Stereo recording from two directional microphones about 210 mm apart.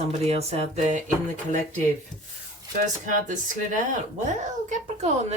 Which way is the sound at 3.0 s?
35° right (ahead or behind).